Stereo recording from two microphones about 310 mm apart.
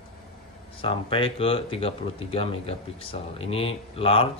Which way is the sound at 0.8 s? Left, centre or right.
Centre.